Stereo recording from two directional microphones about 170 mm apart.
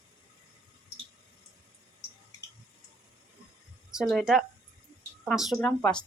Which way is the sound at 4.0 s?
Centre (ahead or behind).